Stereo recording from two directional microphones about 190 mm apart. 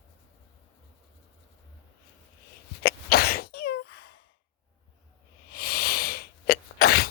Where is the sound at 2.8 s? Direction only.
55° left (ahead or behind).